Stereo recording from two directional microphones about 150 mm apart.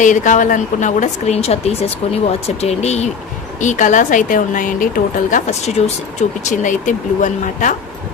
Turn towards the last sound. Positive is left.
turn(degrees=55)  # may be behind; listen again after turning